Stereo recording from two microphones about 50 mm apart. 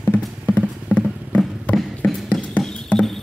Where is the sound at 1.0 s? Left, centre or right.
Left.